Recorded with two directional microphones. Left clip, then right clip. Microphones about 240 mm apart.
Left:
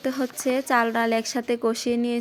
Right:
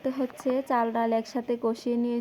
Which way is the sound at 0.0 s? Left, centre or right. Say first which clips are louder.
Left 3 dB; left.